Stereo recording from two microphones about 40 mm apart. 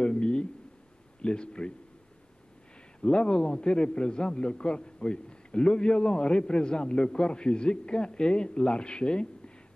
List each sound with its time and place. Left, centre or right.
0.0 s a sound: left
1.2 s a man's voice: left
3.0 s a man's voice: left